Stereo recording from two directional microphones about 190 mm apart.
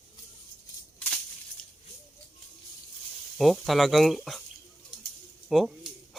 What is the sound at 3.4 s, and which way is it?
Speech, centre (ahead or behind).